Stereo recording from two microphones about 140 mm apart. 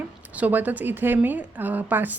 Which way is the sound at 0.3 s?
10° right (ahead or behind).